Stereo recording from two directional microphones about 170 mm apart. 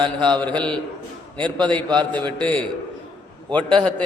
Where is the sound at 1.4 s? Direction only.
30° right (ahead or behind).